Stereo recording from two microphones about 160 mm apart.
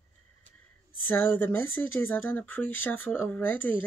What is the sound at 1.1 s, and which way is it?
Speech, 10° left (ahead or behind).